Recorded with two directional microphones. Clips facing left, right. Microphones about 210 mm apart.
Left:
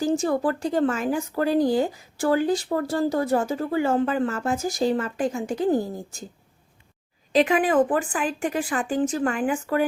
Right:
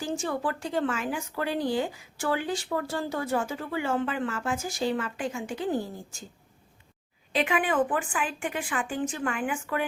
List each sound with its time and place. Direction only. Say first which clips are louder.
0.0 s speech: left 8 dB; 40° left (ahead or behind)
7.3 s speech: left 6 dB; 40° left (ahead or behind)